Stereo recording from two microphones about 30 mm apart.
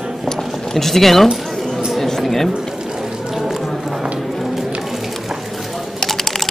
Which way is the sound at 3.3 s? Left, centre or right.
Centre.